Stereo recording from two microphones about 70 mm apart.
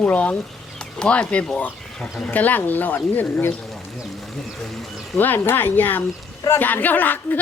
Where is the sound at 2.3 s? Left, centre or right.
Left.